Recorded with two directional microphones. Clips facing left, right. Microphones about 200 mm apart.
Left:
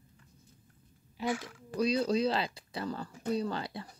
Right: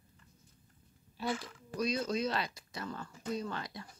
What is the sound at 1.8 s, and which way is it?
Speech, 35° left (ahead or behind).